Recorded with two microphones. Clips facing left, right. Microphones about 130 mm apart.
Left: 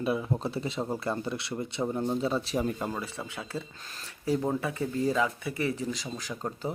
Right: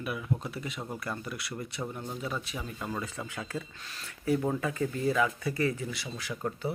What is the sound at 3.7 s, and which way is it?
Speech, 40° left (ahead or behind).